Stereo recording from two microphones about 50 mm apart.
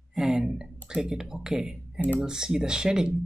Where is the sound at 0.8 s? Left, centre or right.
Centre.